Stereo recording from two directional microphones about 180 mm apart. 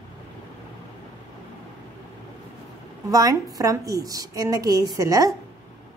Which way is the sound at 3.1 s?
20° right (ahead or behind).